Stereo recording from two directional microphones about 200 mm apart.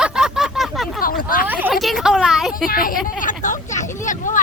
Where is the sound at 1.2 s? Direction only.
45° left (ahead or behind).